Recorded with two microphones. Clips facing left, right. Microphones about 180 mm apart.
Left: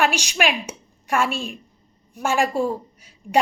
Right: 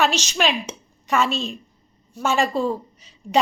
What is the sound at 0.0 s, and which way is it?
A woman's voice, 10° left (ahead or behind).